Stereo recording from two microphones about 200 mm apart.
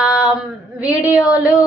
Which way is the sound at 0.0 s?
5° right (ahead or behind).